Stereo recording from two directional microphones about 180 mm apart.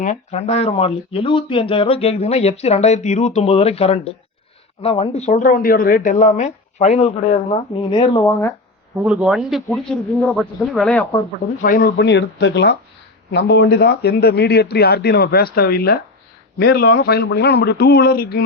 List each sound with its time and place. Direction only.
0.0 s speech: 40° left (ahead or behind); by 8.5 s 15° left (ahead or behind)
9.0 s speech: 5° right (ahead or behind)
11.6 s speech: 55° left (ahead or behind)